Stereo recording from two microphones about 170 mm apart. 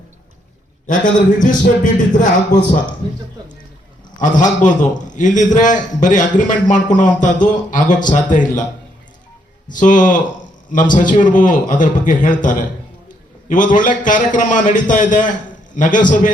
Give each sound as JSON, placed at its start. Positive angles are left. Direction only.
{"t": 0.9, "sound": "a man's voice", "side_deg": 50}
{"t": 4.2, "sound": "a man's voice", "side_deg": 50}
{"t": 9.7, "sound": "a man's voice", "side_deg": 50}